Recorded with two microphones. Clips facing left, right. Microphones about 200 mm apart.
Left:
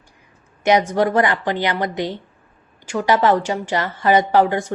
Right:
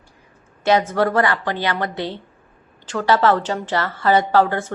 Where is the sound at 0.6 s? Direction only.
15° left (ahead or behind).